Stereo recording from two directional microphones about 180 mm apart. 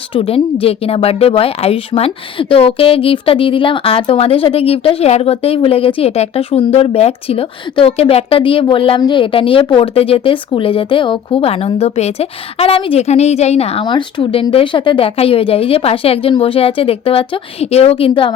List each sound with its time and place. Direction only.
0.1 s a woman's voice: 30° left (ahead or behind)